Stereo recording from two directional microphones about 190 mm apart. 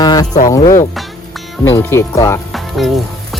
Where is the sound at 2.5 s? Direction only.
Centre (ahead or behind).